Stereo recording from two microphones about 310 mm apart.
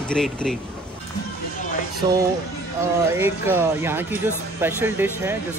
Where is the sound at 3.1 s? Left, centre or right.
Centre.